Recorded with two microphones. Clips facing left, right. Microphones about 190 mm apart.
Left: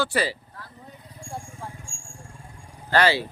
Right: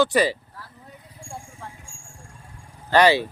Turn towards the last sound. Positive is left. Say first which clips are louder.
# right 4 dB
turn(degrees=-15)  # may be behind; listen again after turning